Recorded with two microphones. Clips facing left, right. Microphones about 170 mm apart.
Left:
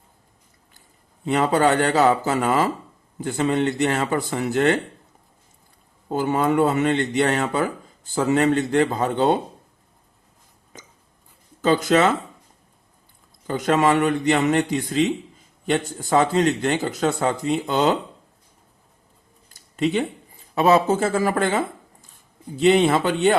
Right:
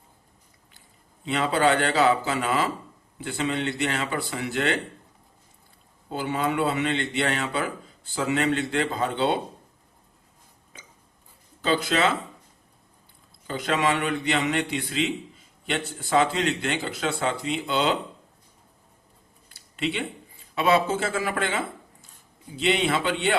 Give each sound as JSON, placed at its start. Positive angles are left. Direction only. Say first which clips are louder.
{"t": 1.2, "sound": "speech", "louder": "left 4 dB", "side_deg": 45}
{"t": 6.1, "sound": "speech", "louder": "left 6 dB", "side_deg": 45}
{"t": 11.6, "sound": "speech", "louder": "left 6 dB", "side_deg": 45}
{"t": 13.5, "sound": "speech", "louder": "left 6 dB", "side_deg": 45}
{"t": 19.5, "sound": "a sound", "louder": "left 6 dB", "side_deg": 40}
{"t": 20.6, "sound": "speech", "louder": "left 5 dB", "side_deg": 40}
{"t": 22.6, "sound": "speech", "louder": "left 7 dB", "side_deg": 45}